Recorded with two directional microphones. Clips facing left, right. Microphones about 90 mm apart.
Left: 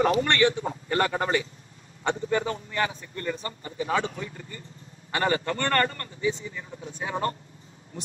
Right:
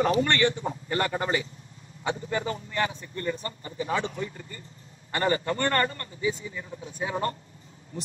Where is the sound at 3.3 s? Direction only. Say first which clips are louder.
Even; 30° left (ahead or behind).